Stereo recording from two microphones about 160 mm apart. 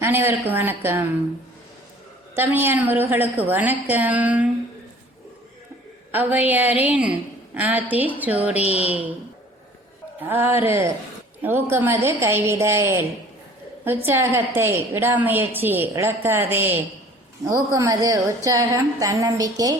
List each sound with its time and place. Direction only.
0.0 s a woman's voice: 15° right (ahead or behind)
2.3 s a woman's voice: 15° right (ahead or behind)
6.1 s a woman's voice: 10° right (ahead or behind)
10.2 s a woman's voice: 15° right (ahead or behind)